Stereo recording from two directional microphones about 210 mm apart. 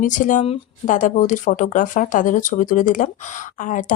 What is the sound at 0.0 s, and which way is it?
Speech, 40° left (ahead or behind).